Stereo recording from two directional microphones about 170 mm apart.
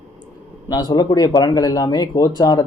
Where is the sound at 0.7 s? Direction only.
25° left (ahead or behind).